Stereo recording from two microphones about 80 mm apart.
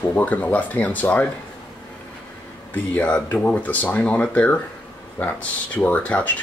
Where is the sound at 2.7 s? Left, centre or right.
Centre.